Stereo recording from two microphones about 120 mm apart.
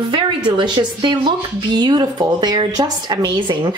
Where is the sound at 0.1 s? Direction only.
40° right (ahead or behind).